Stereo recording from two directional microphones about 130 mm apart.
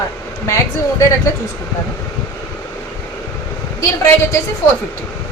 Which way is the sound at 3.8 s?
20° left (ahead or behind).